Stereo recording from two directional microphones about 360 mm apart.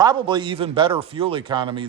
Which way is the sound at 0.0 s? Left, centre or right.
Centre.